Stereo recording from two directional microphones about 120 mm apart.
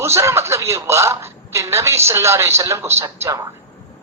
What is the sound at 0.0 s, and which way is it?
A woman's voice, 20° right (ahead or behind).